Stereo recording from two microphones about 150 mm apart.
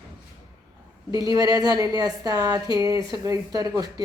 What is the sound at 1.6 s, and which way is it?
Speech, 25° right (ahead or behind).